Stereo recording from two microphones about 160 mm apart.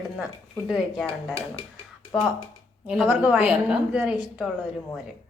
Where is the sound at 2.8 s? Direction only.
5° right (ahead or behind).